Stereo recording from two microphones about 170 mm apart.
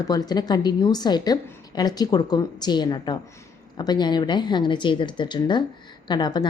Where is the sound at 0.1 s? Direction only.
25° left (ahead or behind).